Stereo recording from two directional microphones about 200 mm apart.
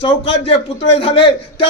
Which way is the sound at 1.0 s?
25° left (ahead or behind).